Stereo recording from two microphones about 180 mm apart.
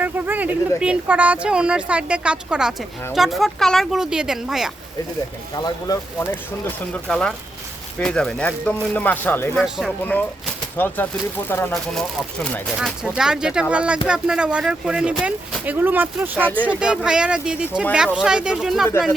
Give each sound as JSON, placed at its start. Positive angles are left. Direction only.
{"t": 0.0, "sound": "a sound", "side_deg": -10}
{"t": 0.8, "sound": "speech", "side_deg": -5}
{"t": 5.5, "sound": "speech", "side_deg": 20}
{"t": 6.7, "sound": "speech", "side_deg": 5}
{"t": 9.6, "sound": "speech", "side_deg": 0}
{"t": 10.0, "sound": "speech", "side_deg": 10}